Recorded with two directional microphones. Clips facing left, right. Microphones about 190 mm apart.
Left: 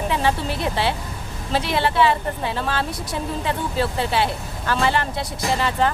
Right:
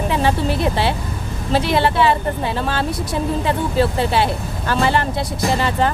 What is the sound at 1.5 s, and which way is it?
Speech, 40° right (ahead or behind).